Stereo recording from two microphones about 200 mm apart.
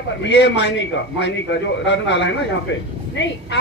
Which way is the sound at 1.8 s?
60° left (ahead or behind).